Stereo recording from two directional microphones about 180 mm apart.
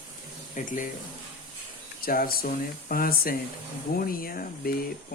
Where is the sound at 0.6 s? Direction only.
45° left (ahead or behind).